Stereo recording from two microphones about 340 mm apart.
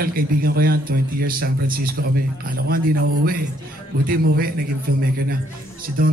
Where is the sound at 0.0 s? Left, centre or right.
Right.